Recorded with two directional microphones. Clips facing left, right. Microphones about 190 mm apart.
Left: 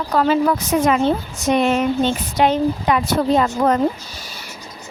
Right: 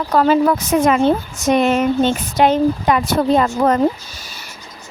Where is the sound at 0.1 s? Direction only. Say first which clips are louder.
Right 3 dB; 45° right (ahead or behind).